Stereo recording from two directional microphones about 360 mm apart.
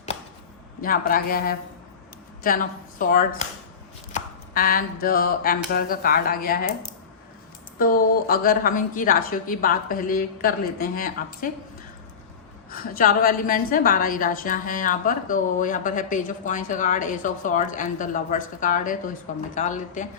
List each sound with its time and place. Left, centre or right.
0.8 s a woman's voice: left
12.7 s a woman's voice: left